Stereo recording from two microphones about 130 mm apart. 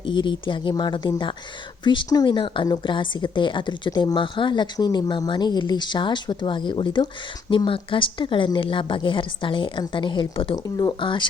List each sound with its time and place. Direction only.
0.0 s a woman's voice: 35° left (ahead or behind)
10.5 s a woman's voice: 30° left (ahead or behind)